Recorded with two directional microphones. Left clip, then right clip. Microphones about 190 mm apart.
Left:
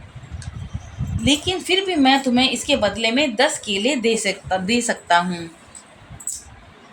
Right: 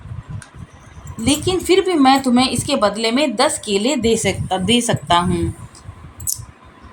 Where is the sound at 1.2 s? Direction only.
10° right (ahead or behind).